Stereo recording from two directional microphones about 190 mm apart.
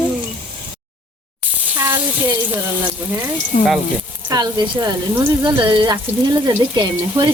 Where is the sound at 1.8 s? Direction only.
15° right (ahead or behind).